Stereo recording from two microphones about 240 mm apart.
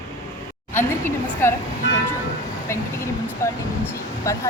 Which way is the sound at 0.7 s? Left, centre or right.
Centre.